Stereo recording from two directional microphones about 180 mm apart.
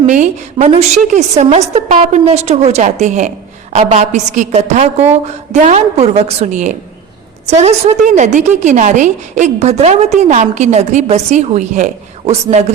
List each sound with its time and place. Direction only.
0.0 s a woman's voice: 40° right (ahead or behind)